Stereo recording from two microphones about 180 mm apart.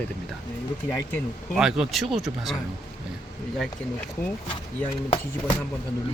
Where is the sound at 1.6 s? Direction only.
5° right (ahead or behind).